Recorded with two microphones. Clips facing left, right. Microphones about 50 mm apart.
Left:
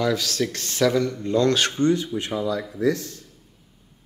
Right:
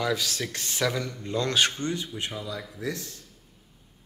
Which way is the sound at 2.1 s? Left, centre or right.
Left.